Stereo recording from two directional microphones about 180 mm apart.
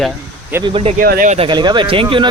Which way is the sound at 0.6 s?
30° right (ahead or behind).